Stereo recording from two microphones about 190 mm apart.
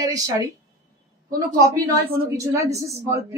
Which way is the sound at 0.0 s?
20° right (ahead or behind).